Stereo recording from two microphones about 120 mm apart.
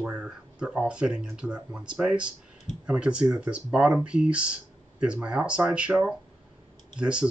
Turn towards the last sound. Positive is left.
turn(degrees=-10)  # may be behind; listen again after turning